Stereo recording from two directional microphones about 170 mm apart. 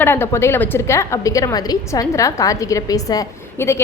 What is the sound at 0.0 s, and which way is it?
A woman's voice, 15° left (ahead or behind).